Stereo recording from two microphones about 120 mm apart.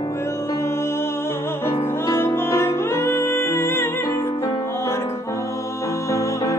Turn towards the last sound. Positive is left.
turn(degrees=25)  # may be behind; listen again after turning